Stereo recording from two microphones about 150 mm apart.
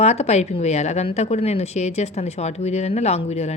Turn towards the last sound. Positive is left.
turn(degrees=45)  # may be behind; listen again after turning